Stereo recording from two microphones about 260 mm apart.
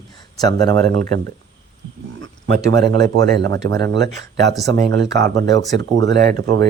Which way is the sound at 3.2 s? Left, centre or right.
Right.